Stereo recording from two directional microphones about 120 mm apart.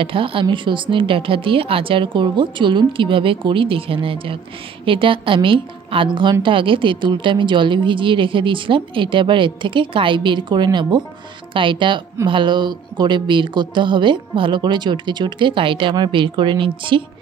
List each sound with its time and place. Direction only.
0.0 s a woman's voice: 45° right (ahead or behind)